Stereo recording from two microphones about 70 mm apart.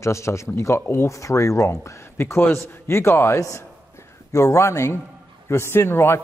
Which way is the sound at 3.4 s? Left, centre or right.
Left.